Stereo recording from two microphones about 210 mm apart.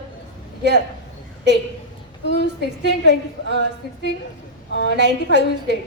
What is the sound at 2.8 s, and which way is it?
A woman's voice, 55° right (ahead or behind).